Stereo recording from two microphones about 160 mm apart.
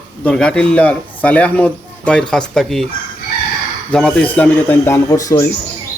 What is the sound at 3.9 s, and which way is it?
A man's voice, 5° left (ahead or behind).